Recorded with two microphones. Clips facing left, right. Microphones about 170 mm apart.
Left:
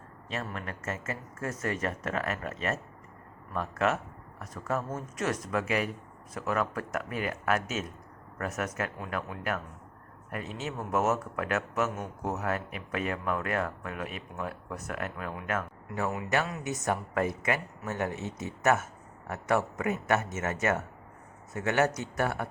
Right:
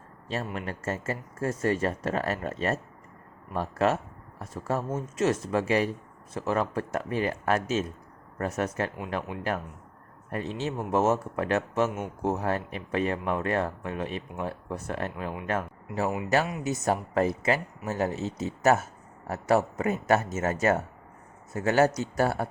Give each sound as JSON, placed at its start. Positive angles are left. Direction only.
{"t": 0.5, "sound": "speech", "side_deg": -30}
{"t": 10.3, "sound": "speech", "side_deg": -30}